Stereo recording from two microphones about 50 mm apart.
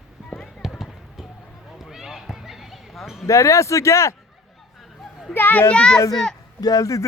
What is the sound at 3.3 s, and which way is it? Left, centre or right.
Speech, left.